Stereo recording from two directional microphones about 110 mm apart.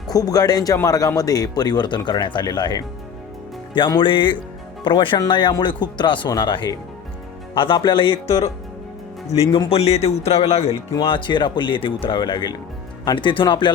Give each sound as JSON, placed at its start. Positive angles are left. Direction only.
{"t": 0.1, "sound": "speech", "side_deg": 35}
{"t": 11.0, "sound": "speech", "side_deg": 50}